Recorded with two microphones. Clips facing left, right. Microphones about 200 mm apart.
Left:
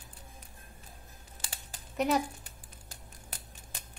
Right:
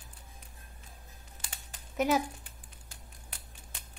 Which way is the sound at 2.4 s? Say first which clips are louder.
Left 2 dB; 40° left (ahead or behind).